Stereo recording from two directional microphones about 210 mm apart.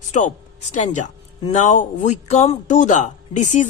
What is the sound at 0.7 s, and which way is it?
A man's voice, 35° left (ahead or behind).